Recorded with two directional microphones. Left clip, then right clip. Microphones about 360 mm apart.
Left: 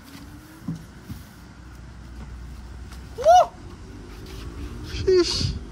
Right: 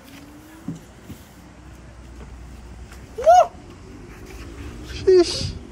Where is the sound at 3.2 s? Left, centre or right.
Left.